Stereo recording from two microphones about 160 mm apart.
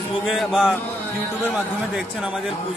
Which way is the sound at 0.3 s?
Centre (ahead or behind).